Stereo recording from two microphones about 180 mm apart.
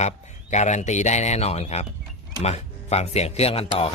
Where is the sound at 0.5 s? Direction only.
40° left (ahead or behind).